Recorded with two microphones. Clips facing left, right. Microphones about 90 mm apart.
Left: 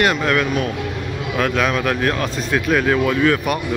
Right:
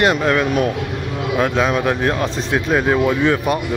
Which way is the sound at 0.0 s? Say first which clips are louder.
Right 2 dB; 25° right (ahead or behind).